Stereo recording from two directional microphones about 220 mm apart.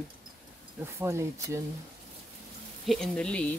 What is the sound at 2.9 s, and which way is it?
Speech, 5° left (ahead or behind).